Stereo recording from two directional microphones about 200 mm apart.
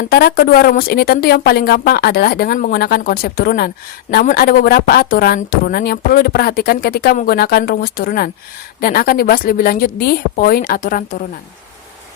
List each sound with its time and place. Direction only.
0.0 s speech: 50° left (ahead or behind)